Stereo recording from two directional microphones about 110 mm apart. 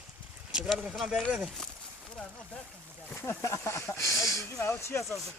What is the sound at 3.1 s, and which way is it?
Speech, 25° left (ahead or behind).